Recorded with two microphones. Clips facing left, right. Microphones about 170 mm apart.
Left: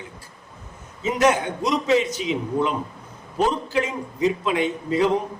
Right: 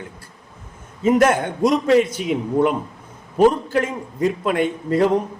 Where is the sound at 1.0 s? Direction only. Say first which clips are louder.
Right 4 dB; 50° right (ahead or behind).